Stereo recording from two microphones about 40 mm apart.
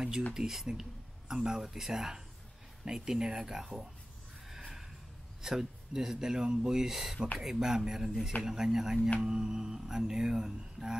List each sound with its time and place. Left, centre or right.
0.3 s speech: centre
4.5 s snort: centre
5.4 s speech: centre
10.8 s music: centre